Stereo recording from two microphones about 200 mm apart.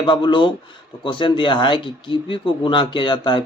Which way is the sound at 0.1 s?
25° left (ahead or behind).